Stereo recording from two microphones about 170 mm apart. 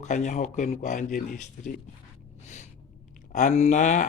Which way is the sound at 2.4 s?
40° left (ahead or behind).